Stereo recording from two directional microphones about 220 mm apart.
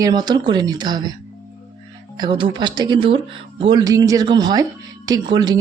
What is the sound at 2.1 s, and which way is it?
Speech, 20° right (ahead or behind).